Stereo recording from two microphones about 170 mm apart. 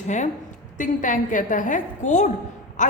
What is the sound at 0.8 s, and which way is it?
A man's voice, 50° left (ahead or behind).